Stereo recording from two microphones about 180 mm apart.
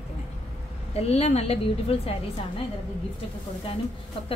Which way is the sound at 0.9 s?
35° left (ahead or behind).